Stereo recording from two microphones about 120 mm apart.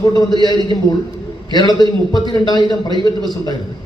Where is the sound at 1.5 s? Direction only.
35° left (ahead or behind).